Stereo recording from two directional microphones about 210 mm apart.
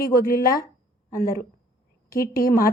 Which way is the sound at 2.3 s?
45° left (ahead or behind).